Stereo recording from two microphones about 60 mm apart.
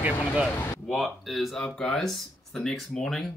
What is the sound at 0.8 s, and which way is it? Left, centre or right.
Speech, centre.